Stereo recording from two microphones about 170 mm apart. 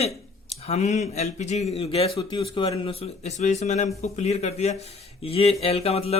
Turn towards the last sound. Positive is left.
turn(degrees=35)  # may be behind; listen again after turning